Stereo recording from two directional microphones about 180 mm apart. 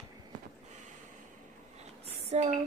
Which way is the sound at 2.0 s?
35° right (ahead or behind).